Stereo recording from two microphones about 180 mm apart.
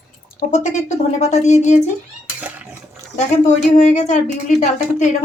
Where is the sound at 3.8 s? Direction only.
40° left (ahead or behind).